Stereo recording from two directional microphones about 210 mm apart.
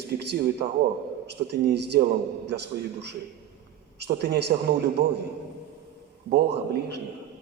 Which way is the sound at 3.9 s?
50° right (ahead or behind).